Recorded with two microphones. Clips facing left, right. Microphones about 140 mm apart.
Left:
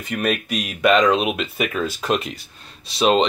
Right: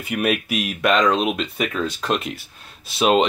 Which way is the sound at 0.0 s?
5° right (ahead or behind).